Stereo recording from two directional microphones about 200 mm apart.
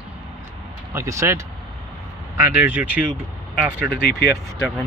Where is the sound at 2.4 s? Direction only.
10° right (ahead or behind).